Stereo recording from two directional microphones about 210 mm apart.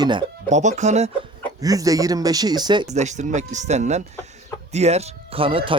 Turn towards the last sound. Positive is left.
turn(degrees=-25)  # may be behind; listen again after turning